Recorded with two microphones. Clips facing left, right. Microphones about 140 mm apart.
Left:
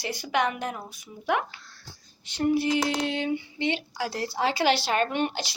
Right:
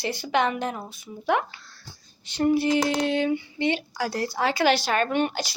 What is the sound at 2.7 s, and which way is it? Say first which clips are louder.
Female singing: right 3 dB; 55° right (ahead or behind).